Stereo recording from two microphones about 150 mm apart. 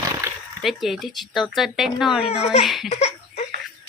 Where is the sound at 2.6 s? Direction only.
Centre (ahead or behind).